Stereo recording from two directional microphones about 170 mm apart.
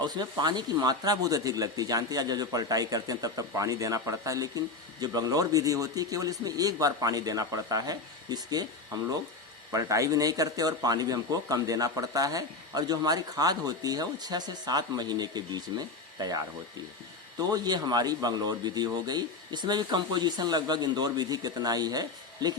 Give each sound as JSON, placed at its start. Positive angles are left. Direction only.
{"t": 0.0, "sound": "speech", "side_deg": -25}
{"t": 9.7, "sound": "speech", "side_deg": -20}